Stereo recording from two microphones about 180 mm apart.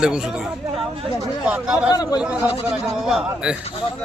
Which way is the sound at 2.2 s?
5° right (ahead or behind).